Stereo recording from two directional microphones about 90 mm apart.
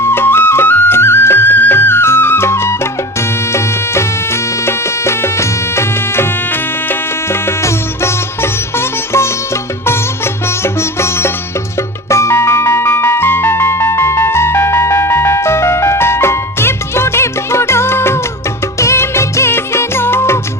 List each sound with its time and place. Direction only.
0.0 s music: 25° left (ahead or behind)
10.6 s music: 30° left (ahead or behind)